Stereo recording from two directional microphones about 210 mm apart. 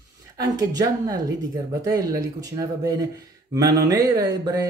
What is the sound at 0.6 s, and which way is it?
Speech, 15° right (ahead or behind).